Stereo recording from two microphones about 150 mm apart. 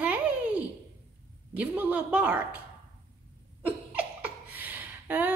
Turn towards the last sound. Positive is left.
turn(degrees=-10)  # may be behind; listen again after turning